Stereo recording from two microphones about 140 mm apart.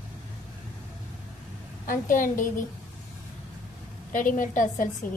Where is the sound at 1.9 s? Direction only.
70° left (ahead or behind).